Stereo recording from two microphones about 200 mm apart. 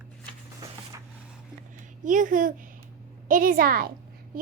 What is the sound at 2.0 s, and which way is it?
A woman's voice, 40° right (ahead or behind).